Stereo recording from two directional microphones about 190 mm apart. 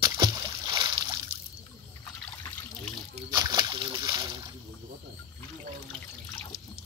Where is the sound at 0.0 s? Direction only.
20° right (ahead or behind).